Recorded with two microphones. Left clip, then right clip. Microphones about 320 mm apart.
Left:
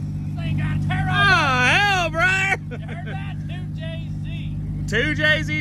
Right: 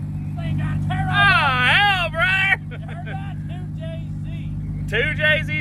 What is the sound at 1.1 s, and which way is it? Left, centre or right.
Vehicle, centre.